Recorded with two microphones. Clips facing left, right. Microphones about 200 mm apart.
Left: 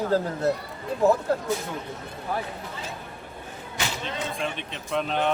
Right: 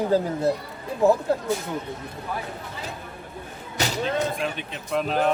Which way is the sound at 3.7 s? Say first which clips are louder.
Right 6 dB; 40° right (ahead or behind).